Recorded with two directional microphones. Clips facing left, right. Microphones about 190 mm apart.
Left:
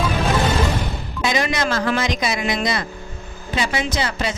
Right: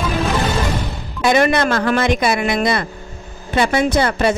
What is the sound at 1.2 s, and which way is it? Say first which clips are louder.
Speech: right 7 dB; 60° right (ahead or behind).